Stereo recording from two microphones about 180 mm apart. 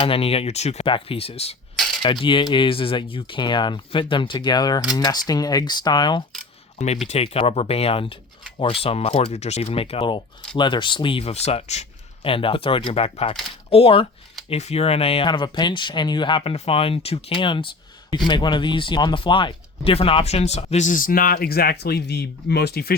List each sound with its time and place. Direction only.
0.0 s speech: 30° left (ahead or behind)
6.7 s speech: 35° left (ahead or behind); by 23.0 s 60° left (ahead or behind)